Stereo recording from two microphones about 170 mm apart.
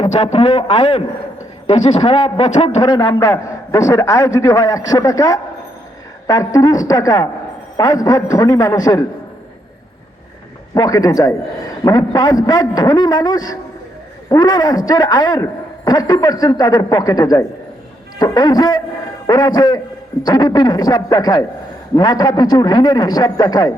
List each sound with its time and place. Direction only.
0.0 s a man's voice: 40° left (ahead or behind); by 9.0 s 20° left (ahead or behind)
10.8 s a man's voice: 20° left (ahead or behind)